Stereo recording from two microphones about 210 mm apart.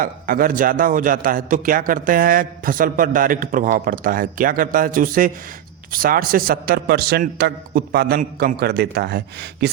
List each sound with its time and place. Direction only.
0.0 s a man's voice: 45° right (ahead or behind)